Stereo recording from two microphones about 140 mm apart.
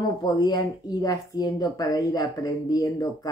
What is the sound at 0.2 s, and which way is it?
Speech, 30° left (ahead or behind).